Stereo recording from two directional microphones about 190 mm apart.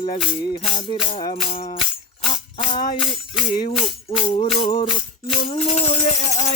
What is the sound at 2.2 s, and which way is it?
Music, 25° left (ahead or behind).